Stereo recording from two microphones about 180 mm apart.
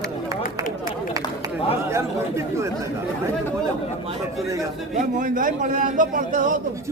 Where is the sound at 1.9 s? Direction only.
15° right (ahead or behind).